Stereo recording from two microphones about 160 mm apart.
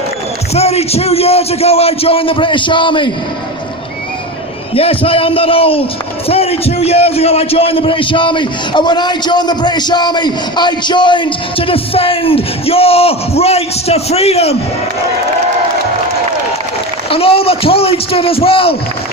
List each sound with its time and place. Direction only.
0.5 s a man's voice: 40° left (ahead or behind)
4.7 s a man's voice: 35° left (ahead or behind)
17.1 s a man's voice: 35° left (ahead or behind)